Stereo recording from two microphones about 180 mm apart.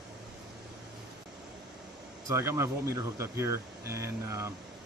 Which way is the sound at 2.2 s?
15° right (ahead or behind).